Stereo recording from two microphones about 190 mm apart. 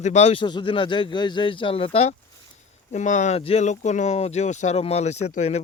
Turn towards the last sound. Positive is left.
turn(degrees=35)  # may be behind; listen again after turning